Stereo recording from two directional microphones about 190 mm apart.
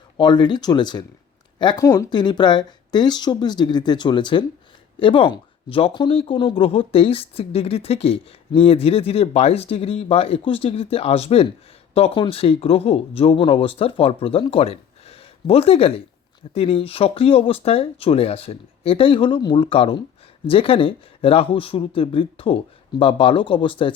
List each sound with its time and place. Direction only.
0.2 s speech: 25° left (ahead or behind)